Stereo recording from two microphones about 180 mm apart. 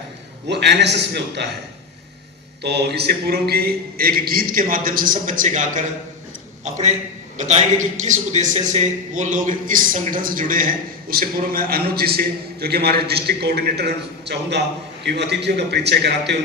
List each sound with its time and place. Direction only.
0.4 s a man's voice: 70° right (ahead or behind)
2.6 s a man's voice: 65° right (ahead or behind)